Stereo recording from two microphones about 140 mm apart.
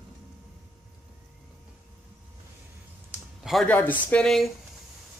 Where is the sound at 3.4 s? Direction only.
Centre (ahead or behind).